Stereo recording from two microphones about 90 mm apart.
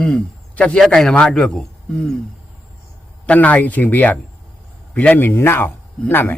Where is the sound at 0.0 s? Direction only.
10° left (ahead or behind).